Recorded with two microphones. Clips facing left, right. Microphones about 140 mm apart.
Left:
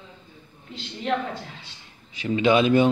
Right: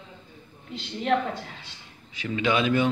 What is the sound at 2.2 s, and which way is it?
Speech, 25° left (ahead or behind).